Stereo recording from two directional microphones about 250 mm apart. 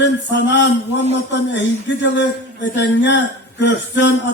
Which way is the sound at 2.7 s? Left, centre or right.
Left.